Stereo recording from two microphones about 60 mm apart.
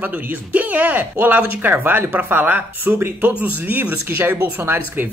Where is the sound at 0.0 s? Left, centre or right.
Right.